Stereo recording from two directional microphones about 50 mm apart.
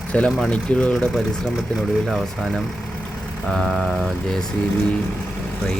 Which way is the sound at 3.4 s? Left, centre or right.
Centre.